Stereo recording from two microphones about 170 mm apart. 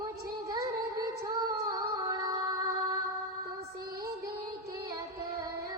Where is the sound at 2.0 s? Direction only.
20° right (ahead or behind).